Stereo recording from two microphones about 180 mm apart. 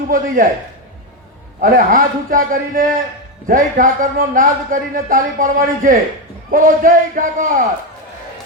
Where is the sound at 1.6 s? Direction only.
50° right (ahead or behind).